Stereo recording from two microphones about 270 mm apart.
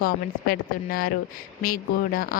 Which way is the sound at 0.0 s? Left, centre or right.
Left.